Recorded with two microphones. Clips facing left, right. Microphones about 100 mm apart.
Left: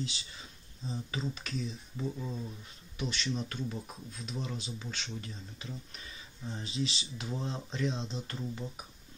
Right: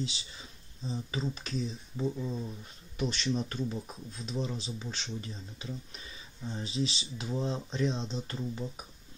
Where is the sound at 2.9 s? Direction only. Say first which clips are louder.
Right 4 dB; 40° right (ahead or behind).